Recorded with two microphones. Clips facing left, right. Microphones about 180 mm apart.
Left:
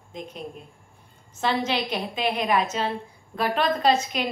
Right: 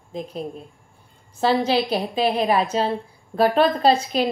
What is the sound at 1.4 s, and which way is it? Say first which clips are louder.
A woman's voice: right 6 dB; 35° right (ahead or behind).